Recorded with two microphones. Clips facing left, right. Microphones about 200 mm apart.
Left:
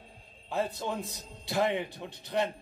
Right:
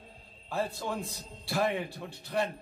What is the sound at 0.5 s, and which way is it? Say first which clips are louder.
A man's voice: left 1 dB; 20° left (ahead or behind).